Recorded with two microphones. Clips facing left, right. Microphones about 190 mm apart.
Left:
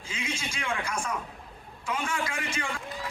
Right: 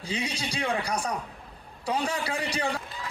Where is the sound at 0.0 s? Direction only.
35° right (ahead or behind).